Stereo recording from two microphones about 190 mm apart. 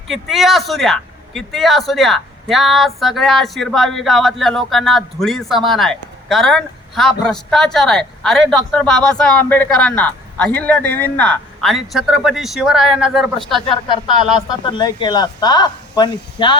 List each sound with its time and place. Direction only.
0.1 s a man's voice: centre (ahead or behind)
14.6 s speech: 25° left (ahead or behind)